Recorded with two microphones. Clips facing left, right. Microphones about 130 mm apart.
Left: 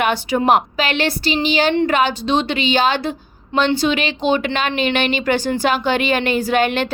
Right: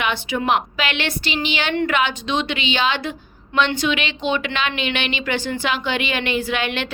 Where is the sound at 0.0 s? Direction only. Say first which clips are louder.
Left 5 dB; 40° left (ahead or behind).